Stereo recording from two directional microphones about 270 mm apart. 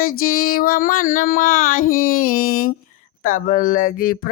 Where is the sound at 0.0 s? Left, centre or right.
Left.